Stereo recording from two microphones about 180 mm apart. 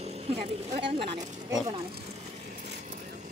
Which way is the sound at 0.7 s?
30° right (ahead or behind).